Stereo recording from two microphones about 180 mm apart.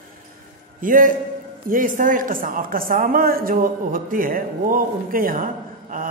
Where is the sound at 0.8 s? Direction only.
50° right (ahead or behind).